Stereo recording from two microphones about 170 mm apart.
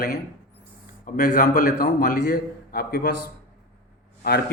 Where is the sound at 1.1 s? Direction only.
50° left (ahead or behind).